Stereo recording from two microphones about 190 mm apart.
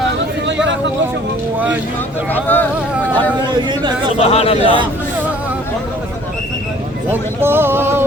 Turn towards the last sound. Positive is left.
turn(degrees=-10)  # may be behind; listen again after turning